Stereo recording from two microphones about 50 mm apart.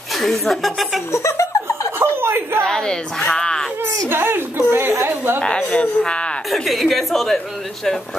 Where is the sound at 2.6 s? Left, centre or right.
Centre.